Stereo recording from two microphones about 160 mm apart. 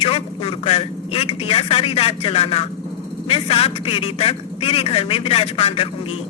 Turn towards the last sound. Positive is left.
turn(degrees=35)  # may be behind; listen again after turning